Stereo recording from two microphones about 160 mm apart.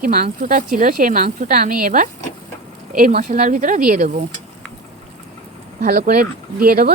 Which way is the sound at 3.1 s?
55° right (ahead or behind).